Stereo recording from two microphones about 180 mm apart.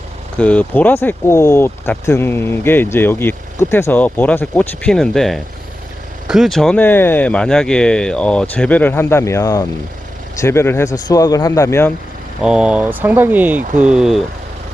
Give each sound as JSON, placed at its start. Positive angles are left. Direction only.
{"t": 0.3, "sound": "speech", "side_deg": 5}
{"t": 12.4, "sound": "speech", "side_deg": -5}